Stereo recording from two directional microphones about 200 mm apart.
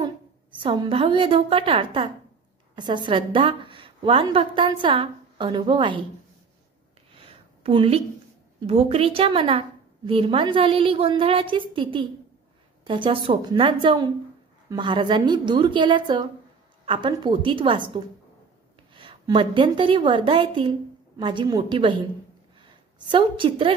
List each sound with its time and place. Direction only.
0.6 s a woman's voice: 25° right (ahead or behind)
7.2 s a sound: 30° right (ahead or behind)
8.5 s a woman's voice: 30° right (ahead or behind)